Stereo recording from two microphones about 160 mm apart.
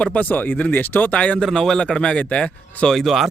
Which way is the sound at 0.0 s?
10° left (ahead or behind).